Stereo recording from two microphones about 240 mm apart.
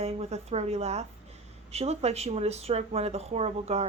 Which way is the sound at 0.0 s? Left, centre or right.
Right.